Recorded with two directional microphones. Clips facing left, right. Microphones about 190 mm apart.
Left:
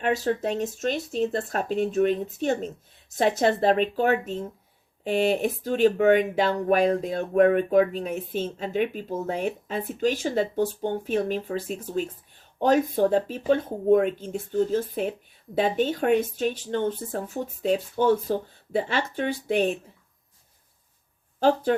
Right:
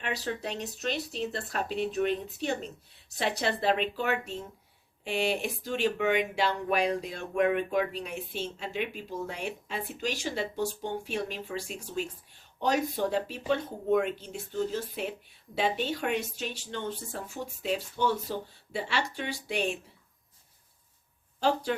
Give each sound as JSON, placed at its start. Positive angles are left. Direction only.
{"t": 0.0, "sound": "speech", "side_deg": 45}
{"t": 21.4, "sound": "speech", "side_deg": 45}